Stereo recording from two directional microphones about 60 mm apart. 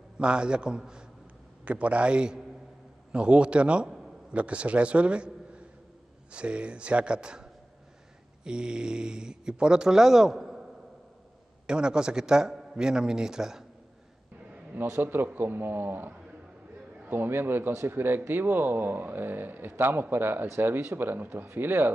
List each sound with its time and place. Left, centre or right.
0.2 s a man's voice: centre
8.5 s speech: centre
11.6 s speech: centre
14.8 s speech: right